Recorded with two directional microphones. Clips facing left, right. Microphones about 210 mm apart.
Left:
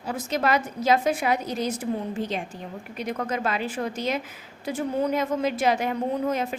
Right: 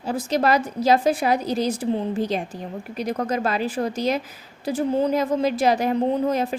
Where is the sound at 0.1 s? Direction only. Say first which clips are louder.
Right 4 dB; 35° right (ahead or behind).